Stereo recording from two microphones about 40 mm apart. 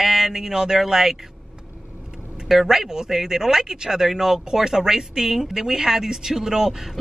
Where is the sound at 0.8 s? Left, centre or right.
Centre.